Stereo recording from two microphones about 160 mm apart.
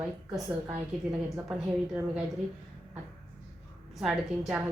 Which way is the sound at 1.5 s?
5° right (ahead or behind).